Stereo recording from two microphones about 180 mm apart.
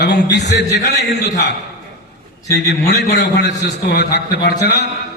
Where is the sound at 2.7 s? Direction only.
70° left (ahead or behind).